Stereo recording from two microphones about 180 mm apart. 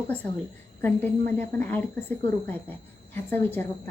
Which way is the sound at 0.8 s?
10° left (ahead or behind).